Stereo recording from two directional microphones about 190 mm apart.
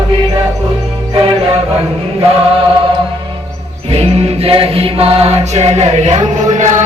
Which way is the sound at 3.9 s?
30° right (ahead or behind).